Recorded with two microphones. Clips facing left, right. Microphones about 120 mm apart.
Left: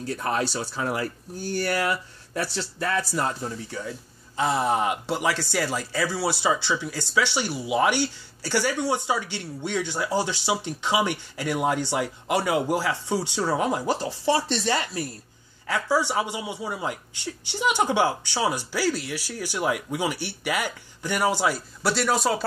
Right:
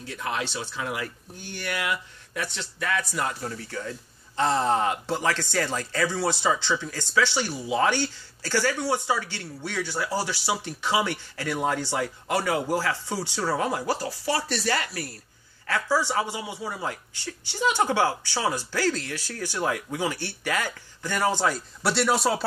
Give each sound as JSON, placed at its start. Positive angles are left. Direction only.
{"t": 0.0, "sound": "speech", "side_deg": 40}
{"t": 3.4, "sound": "speech", "side_deg": 15}
{"t": 21.8, "sound": "speech", "side_deg": 0}